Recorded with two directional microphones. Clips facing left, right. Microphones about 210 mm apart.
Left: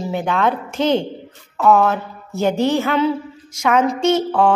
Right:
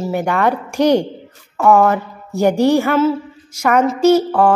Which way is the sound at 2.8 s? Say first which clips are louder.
Right 3 dB; 5° right (ahead or behind).